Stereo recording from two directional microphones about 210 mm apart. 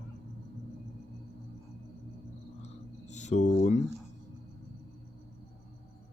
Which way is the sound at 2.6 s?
35° left (ahead or behind).